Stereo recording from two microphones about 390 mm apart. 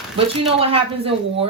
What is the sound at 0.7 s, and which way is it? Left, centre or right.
Speech, centre.